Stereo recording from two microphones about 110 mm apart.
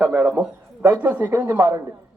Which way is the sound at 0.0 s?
15° right (ahead or behind).